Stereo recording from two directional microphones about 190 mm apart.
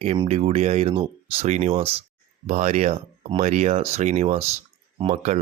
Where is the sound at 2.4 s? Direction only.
40° right (ahead or behind).